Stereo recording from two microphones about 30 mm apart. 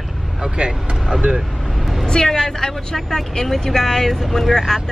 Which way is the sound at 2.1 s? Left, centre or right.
Left.